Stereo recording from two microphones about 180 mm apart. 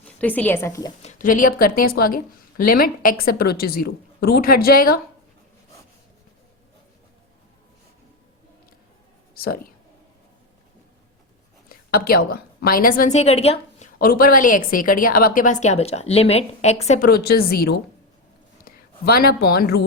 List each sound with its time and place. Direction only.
0.0 s speech: 10° left (ahead or behind)
1.0 s a woman's voice: 45° left (ahead or behind)
9.3 s a sound: 55° left (ahead or behind)
11.7 s a woman's voice: 55° left (ahead or behind); by 13.9 s 35° left (ahead or behind)
14.0 s a woman's voice: 55° left (ahead or behind); by 17.0 s 35° left (ahead or behind)
17.0 s a woman's voice: 55° left (ahead or behind)